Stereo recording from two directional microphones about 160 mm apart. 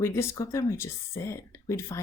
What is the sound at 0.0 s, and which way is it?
Speech, 15° left (ahead or behind).